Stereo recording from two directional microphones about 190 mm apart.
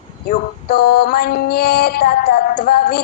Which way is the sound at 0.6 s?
55° left (ahead or behind).